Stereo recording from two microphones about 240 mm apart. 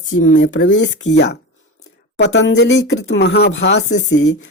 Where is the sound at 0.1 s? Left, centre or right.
Left.